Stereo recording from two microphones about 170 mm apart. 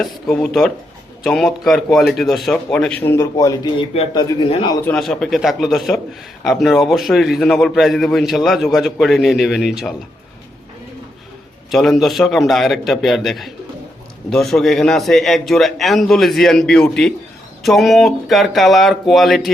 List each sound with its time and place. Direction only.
0.0 s a man's voice: 5° left (ahead or behind); by 4.8 s 30° left (ahead or behind)
4.9 s a man's voice: centre (ahead or behind)
11.7 s a man's voice: centre (ahead or behind)